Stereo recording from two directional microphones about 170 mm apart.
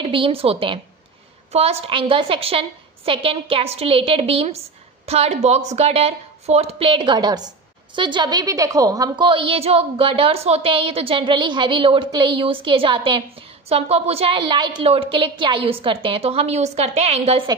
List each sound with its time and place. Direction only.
0.0 s a woman's voice: 30° right (ahead or behind)